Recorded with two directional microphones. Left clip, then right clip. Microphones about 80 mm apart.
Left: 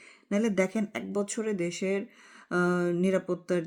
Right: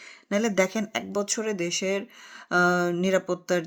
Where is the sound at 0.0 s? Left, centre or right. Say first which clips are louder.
Right 3 dB; left.